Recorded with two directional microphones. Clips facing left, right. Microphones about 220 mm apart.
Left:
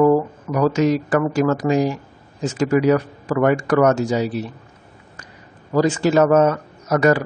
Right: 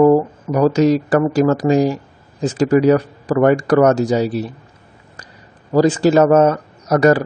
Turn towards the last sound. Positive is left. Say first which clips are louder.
# right 3 dB
turn(degrees=-35)  # may be behind; listen again after turning